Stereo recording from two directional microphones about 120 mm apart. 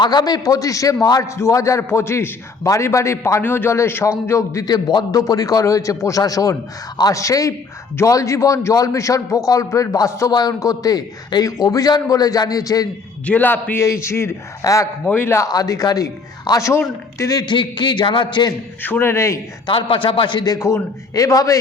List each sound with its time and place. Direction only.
0.0 s a man's voice: 40° left (ahead or behind)
13.2 s a man's voice: 15° left (ahead or behind)
15.0 s a man's voice: 15° left (ahead or behind)
17.4 s a man's voice: 40° left (ahead or behind)
18.8 s a man's voice: 15° left (ahead or behind)
19.6 s a man's voice: 45° left (ahead or behind); by 21.6 s 30° left (ahead or behind)